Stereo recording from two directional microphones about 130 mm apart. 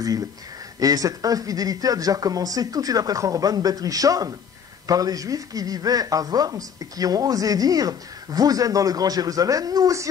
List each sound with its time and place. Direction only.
0.7 s speech: 30° right (ahead or behind)